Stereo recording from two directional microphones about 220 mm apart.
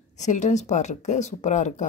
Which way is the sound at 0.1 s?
35° left (ahead or behind).